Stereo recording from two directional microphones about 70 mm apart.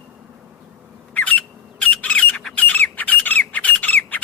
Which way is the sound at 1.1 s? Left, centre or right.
Left.